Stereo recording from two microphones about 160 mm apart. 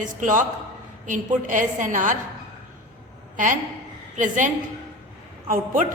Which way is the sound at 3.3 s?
55° right (ahead or behind).